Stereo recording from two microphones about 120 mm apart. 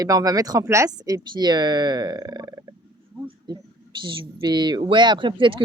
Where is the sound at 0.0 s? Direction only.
30° right (ahead or behind).